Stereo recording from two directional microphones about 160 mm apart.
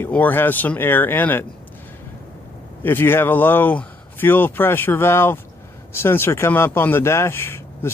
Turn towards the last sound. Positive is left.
turn(degrees=15)  # may be behind; listen again after turning